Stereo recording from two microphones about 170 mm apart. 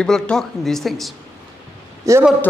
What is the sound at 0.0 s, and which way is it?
A woman's voice, 5° left (ahead or behind).